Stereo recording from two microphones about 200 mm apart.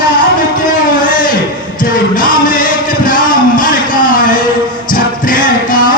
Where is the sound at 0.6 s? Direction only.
45° left (ahead or behind).